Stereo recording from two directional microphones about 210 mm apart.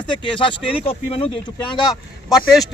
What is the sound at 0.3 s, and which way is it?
Speech, 25° left (ahead or behind).